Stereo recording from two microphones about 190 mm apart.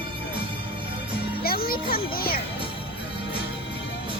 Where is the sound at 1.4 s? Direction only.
50° left (ahead or behind).